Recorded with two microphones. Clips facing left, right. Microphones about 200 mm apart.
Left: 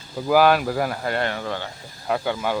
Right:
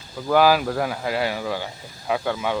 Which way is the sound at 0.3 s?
Centre (ahead or behind).